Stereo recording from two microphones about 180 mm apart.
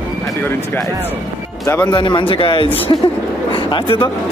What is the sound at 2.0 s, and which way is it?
Speech, 25° left (ahead or behind).